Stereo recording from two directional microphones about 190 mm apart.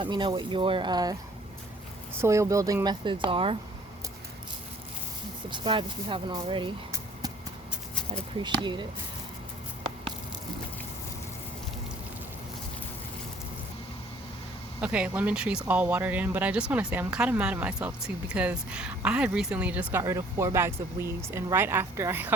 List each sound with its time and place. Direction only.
0.0 s speech: 25° right (ahead or behind)
2.2 s speech: 15° right (ahead or behind)
5.5 s speech: 25° right (ahead or behind)
14.8 s speech: 5° right (ahead or behind)